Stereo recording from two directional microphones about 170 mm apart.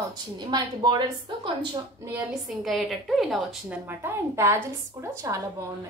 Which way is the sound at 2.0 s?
10° right (ahead or behind).